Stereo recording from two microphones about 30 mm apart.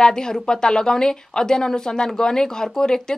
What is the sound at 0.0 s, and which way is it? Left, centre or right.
Speech, left.